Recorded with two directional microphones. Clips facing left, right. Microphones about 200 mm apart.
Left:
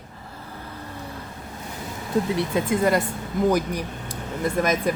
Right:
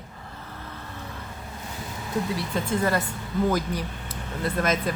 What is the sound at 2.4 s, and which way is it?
Speech, 15° left (ahead or behind).